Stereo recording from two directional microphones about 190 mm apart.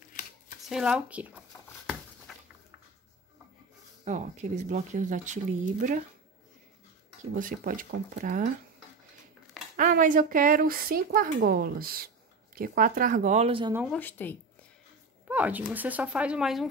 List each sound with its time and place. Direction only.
0.6 s speech: 5° right (ahead or behind)
4.0 s speech: 40° right (ahead or behind)
7.3 s speech: 45° right (ahead or behind)
9.8 s speech: 45° right (ahead or behind); by 13.7 s 25° right (ahead or behind)
13.8 s speech: 10° left (ahead or behind)
15.2 s a sound: 10° right (ahead or behind)
15.7 s speech: 10° right (ahead or behind)